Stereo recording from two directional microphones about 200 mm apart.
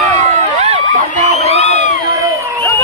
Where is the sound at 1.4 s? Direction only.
35° left (ahead or behind).